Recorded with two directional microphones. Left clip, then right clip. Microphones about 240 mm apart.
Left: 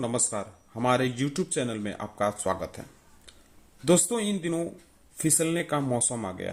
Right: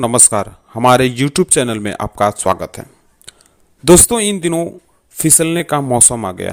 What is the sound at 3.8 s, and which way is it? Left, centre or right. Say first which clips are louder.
Speech: right 14 dB; right.